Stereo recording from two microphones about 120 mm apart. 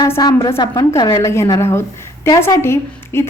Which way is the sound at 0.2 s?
35° left (ahead or behind).